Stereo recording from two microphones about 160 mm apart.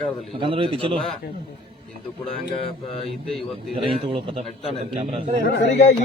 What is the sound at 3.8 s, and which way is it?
Speech, 35° right (ahead or behind).